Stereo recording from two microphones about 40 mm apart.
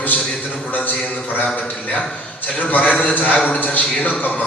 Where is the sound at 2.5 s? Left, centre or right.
Left.